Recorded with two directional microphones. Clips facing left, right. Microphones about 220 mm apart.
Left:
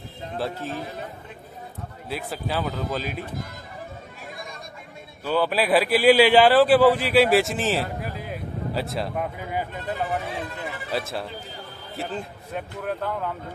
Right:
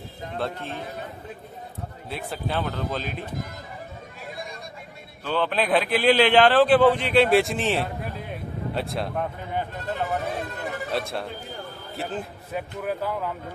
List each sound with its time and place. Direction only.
0.4 s speech: 5° left (ahead or behind)
2.0 s speech: centre (ahead or behind)
5.2 s a man's voice: 10° left (ahead or behind)
10.3 s speech: 45° right (ahead or behind)
10.9 s speech: centre (ahead or behind)